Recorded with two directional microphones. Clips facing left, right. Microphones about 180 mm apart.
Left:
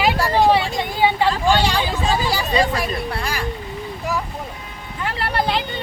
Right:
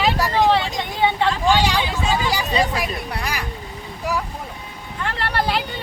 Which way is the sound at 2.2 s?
15° right (ahead or behind).